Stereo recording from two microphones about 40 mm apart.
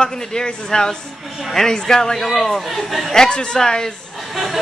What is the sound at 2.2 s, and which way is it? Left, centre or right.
Speech, centre.